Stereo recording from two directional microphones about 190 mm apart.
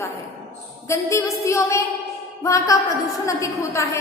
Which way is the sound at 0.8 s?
15° left (ahead or behind).